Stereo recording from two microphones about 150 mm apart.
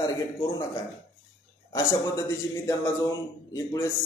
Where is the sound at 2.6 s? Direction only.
20° left (ahead or behind).